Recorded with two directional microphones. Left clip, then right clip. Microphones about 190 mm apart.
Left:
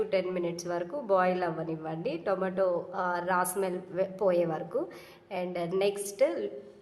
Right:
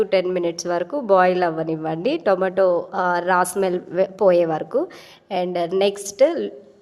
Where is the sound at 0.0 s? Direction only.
45° right (ahead or behind).